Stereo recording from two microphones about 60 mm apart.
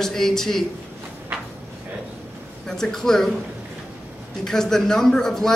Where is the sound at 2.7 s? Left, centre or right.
Centre.